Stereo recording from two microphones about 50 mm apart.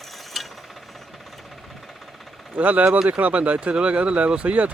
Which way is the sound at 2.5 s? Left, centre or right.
Right.